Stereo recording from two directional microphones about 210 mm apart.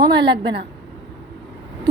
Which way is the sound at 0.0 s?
20° right (ahead or behind).